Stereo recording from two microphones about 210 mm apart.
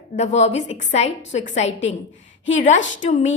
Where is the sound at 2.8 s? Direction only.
65° left (ahead or behind).